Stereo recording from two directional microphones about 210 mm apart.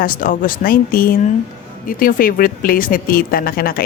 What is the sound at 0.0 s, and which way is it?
Speech, 40° left (ahead or behind).